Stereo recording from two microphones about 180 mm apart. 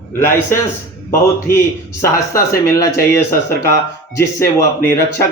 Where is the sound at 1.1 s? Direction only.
15° left (ahead or behind).